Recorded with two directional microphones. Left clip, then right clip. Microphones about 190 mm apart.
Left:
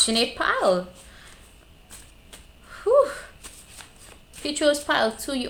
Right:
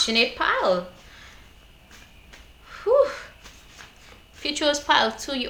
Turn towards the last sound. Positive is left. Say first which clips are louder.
# right 2 dB
turn(degrees=40)  # may be behind; listen again after turning